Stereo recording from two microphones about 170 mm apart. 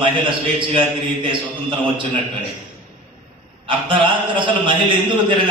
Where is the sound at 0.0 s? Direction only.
30° right (ahead or behind).